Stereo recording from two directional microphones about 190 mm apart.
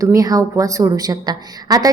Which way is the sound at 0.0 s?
20° right (ahead or behind).